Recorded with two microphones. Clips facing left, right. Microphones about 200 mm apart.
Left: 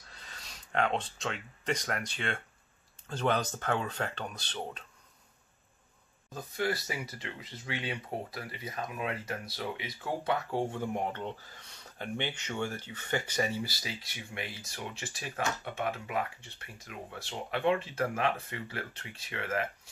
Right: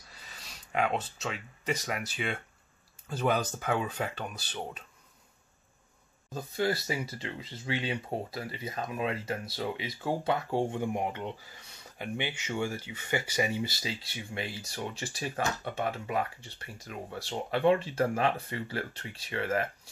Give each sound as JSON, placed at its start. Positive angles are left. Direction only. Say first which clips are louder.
{"t": 0.1, "sound": "speech", "louder": "even", "side_deg": -5}
{"t": 6.3, "sound": "speech", "louder": "right 3 dB", "side_deg": -25}
{"t": 10.8, "sound": "speech", "louder": "right 2 dB", "side_deg": -10}